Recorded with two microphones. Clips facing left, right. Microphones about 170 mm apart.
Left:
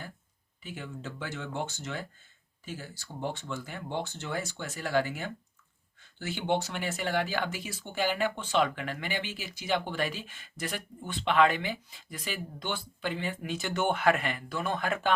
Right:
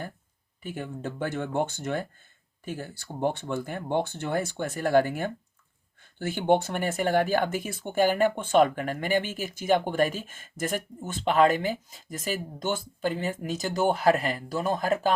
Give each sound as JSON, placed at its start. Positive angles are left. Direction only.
{"t": 0.6, "sound": "speech", "side_deg": -50}